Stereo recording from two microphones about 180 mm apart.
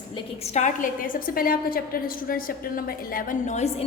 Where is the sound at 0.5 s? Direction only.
45° left (ahead or behind).